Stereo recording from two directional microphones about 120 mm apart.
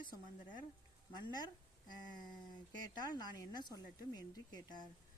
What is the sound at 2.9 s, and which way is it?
Speech, 35° left (ahead or behind).